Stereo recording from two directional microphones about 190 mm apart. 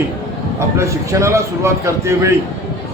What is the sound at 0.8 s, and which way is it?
Speech, 15° right (ahead or behind).